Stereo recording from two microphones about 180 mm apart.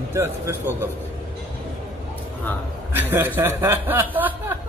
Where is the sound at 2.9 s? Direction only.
10° right (ahead or behind).